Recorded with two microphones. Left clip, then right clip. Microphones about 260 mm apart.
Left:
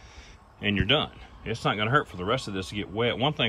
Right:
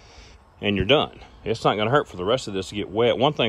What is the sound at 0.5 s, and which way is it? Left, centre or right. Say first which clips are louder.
Speech: right 5 dB; centre.